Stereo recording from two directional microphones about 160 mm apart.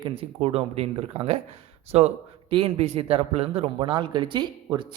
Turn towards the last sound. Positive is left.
turn(degrees=-30)  # may be behind; listen again after turning